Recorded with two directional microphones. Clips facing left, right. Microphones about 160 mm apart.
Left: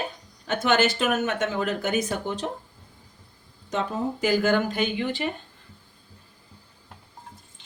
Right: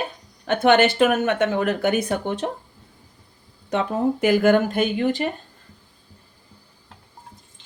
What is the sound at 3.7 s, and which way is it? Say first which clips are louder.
A woman's voice: right 6 dB; 60° right (ahead or behind).